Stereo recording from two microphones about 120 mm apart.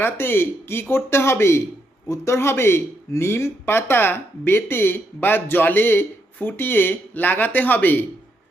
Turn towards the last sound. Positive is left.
turn(degrees=15)  # may be behind; listen again after turning